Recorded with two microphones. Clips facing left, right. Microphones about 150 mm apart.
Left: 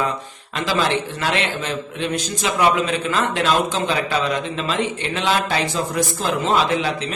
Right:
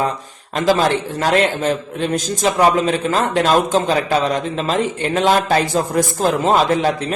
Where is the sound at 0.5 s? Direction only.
45° right (ahead or behind).